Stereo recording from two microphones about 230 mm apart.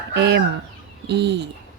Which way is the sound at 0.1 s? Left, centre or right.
Right.